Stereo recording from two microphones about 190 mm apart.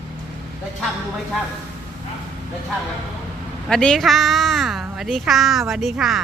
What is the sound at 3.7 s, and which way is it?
A woman's voice, 5° left (ahead or behind).